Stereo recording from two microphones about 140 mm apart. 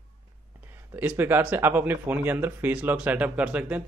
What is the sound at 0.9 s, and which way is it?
Speech, 15° right (ahead or behind).